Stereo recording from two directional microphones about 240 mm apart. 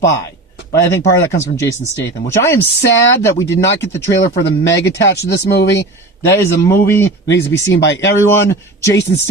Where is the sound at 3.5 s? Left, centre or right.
Left.